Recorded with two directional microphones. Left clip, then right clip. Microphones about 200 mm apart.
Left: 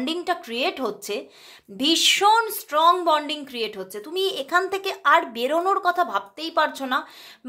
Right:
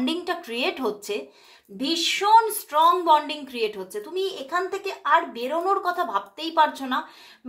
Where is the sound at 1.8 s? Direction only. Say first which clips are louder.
Left 5 dB; 40° left (ahead or behind).